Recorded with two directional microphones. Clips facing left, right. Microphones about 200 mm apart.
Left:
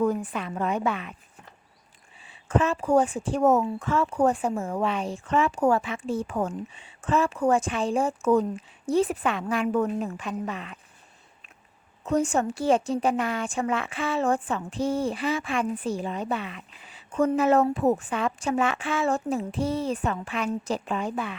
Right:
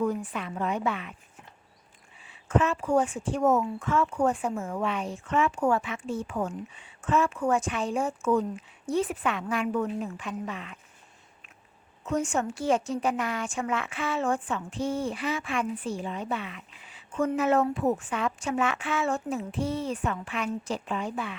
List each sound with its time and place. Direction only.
0.0 s a woman's voice: 45° left (ahead or behind)
2.2 s a woman's voice: 30° left (ahead or behind)
6.7 s a woman's voice: 30° left (ahead or behind)
9.7 s a woman's voice: 45° left (ahead or behind)
12.0 s a woman's voice: 35° left (ahead or behind)